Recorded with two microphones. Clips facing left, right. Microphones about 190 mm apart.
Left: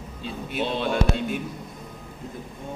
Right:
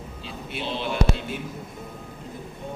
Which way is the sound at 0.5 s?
50° left (ahead or behind).